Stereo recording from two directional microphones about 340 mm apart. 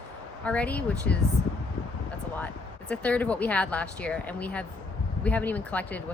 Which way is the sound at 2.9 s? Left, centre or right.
Centre.